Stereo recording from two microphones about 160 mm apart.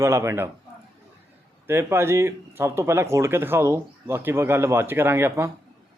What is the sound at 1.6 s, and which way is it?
Speech, 15° right (ahead or behind).